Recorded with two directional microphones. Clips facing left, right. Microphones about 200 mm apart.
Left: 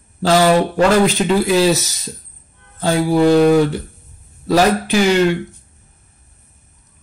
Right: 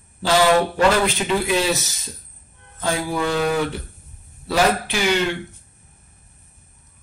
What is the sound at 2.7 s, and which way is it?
Speech, 30° left (ahead or behind).